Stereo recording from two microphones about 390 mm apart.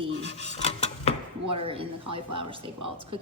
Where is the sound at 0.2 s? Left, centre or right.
Centre.